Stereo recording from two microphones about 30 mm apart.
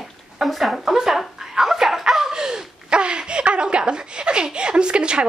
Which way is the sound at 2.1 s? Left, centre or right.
Centre.